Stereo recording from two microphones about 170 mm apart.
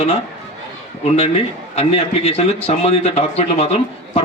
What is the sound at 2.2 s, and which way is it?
Speech, 35° left (ahead or behind).